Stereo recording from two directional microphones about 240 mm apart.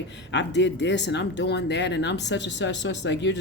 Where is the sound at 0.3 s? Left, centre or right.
Left.